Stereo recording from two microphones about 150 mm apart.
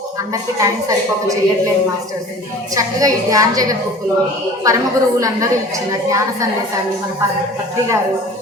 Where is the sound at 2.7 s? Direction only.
25° right (ahead or behind).